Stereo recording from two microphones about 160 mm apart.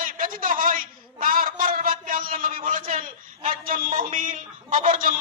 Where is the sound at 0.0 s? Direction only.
60° right (ahead or behind).